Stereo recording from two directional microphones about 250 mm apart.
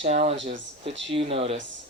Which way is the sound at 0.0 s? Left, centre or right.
Right.